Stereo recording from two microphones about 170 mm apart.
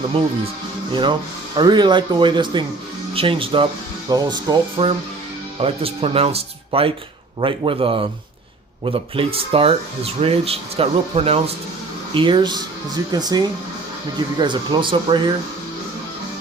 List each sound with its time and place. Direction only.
1.5 s speech: 25° right (ahead or behind)